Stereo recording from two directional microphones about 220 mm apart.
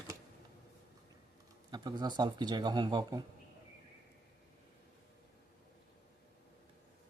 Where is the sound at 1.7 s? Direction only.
20° right (ahead or behind).